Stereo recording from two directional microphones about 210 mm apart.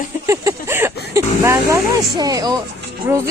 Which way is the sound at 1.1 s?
15° right (ahead or behind).